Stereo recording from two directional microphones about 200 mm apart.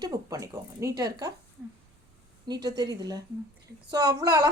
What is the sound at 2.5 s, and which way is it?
A woman's voice, 20° right (ahead or behind).